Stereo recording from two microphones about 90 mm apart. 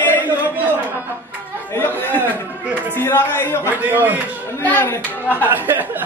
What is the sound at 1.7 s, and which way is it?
Speech, 25° left (ahead or behind).